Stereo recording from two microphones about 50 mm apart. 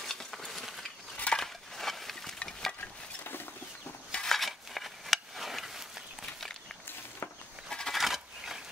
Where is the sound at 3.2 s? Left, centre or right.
Left.